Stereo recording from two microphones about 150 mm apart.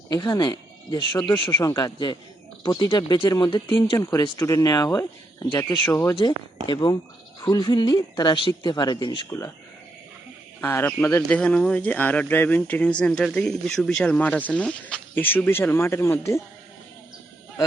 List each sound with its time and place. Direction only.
0.1 s speech: 25° left (ahead or behind)
4.0 s speech: 20° left (ahead or behind)
5.8 s speech: 15° left (ahead or behind)
6.1 s speech: 30° left (ahead or behind)
10.6 s speech: 15° left (ahead or behind)